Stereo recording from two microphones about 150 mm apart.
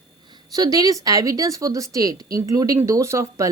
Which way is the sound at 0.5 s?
25° right (ahead or behind).